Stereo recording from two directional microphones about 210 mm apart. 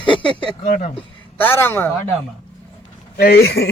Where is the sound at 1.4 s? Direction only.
10° left (ahead or behind).